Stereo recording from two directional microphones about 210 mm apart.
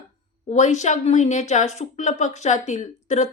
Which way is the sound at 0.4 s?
35° left (ahead or behind).